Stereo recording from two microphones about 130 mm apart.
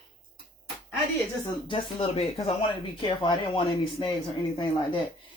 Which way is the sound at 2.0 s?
50° left (ahead or behind).